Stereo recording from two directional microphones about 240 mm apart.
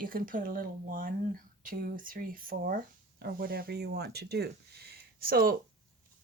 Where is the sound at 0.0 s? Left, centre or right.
Right.